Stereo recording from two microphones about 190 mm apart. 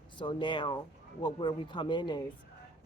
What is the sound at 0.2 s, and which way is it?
Speech, 25° left (ahead or behind).